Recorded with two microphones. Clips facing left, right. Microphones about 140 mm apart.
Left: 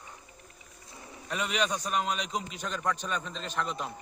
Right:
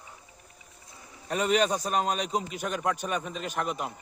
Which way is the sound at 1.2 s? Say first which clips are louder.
Right 6 dB; 40° right (ahead or behind).